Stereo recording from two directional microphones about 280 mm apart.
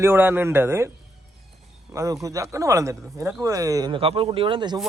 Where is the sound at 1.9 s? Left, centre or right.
Centre.